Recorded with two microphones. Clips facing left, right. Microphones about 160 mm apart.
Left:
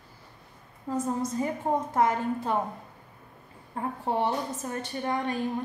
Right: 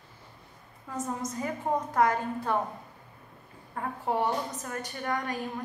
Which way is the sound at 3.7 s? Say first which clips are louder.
Left 1 dB; 25° left (ahead or behind).